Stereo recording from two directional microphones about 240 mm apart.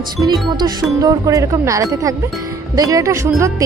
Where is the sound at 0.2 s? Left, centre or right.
Centre.